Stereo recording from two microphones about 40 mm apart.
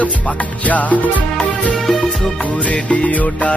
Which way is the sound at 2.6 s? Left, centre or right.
Left.